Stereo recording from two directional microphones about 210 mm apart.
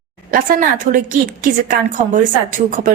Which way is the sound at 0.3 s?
40° right (ahead or behind).